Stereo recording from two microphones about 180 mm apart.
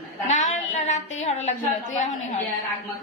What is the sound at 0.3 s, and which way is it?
A woman's voice, 40° left (ahead or behind).